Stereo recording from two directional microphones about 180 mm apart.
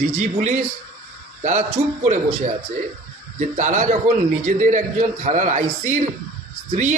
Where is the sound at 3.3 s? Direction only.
45° right (ahead or behind).